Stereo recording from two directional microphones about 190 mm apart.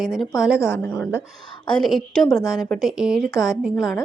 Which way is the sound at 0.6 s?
15° left (ahead or behind).